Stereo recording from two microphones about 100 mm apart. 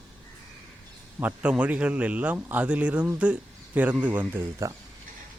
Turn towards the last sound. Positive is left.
turn(degrees=-15)  # may be behind; listen again after turning